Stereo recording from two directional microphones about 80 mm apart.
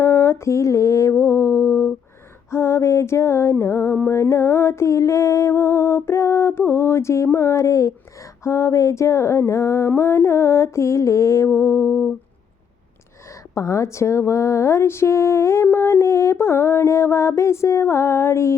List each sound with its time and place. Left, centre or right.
0.0 s music: left
13.5 s speech: left